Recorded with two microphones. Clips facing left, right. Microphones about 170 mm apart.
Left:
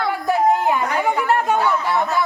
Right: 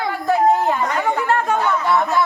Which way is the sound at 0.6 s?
15° left (ahead or behind).